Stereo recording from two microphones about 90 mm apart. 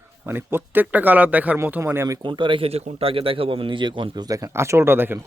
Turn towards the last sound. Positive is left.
turn(degrees=-25)  # may be behind; listen again after turning